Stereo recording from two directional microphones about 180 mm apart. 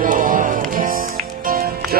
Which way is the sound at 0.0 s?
50° right (ahead or behind).